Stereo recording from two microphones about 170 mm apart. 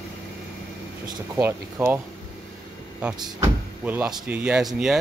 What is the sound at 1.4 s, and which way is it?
Speech, 10° right (ahead or behind).